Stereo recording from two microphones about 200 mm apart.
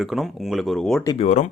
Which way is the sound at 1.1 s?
35° left (ahead or behind).